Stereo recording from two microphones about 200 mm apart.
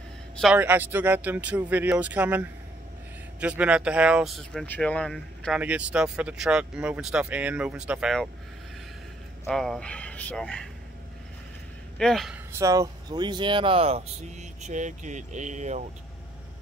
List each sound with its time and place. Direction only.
0.4 s speech: 5° right (ahead or behind)
5.6 s speech: 5° right (ahead or behind)
9.5 s speech: 5° left (ahead or behind)
12.0 s speech: centre (ahead or behind)
12.5 s speech: 15° right (ahead or behind); by 15.8 s 35° right (ahead or behind)